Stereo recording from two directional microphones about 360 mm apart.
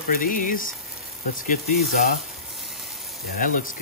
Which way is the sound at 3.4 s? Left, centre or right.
Left.